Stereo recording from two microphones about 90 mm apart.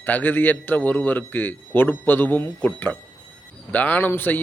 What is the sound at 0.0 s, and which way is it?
A man's voice, 20° left (ahead or behind).